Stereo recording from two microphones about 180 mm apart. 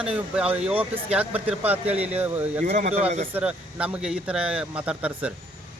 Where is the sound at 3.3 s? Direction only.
5° right (ahead or behind).